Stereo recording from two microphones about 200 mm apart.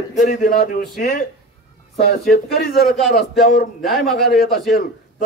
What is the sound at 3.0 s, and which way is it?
A man's voice, centre (ahead or behind).